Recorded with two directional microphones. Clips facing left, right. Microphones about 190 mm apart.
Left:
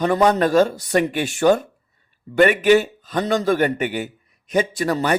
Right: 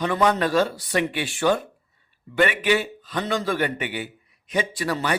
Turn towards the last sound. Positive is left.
turn(degrees=45)  # may be behind; listen again after turning